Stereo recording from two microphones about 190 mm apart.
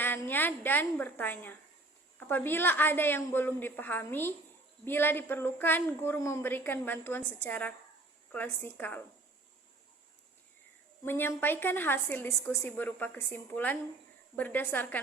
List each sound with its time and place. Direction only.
0.0 s a woman's voice: 10° left (ahead or behind)
11.0 s a woman's voice: 10° left (ahead or behind)